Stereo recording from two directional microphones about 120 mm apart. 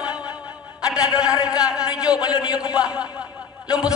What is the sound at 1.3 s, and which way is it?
Speech, 30° left (ahead or behind).